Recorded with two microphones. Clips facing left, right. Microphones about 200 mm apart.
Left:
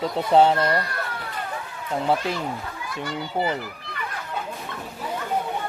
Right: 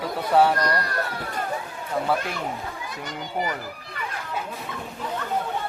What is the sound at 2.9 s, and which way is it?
Speech, 20° right (ahead or behind).